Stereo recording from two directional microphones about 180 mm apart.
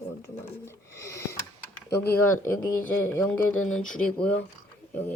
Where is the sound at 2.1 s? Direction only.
10° left (ahead or behind).